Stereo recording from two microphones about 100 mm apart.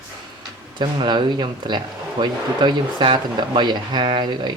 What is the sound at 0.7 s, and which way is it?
Speech, 50° right (ahead or behind).